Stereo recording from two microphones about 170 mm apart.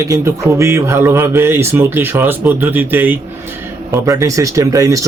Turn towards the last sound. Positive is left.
turn(degrees=-20)  # may be behind; listen again after turning